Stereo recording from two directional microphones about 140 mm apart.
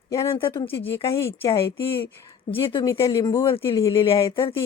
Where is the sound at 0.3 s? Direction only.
40° left (ahead or behind).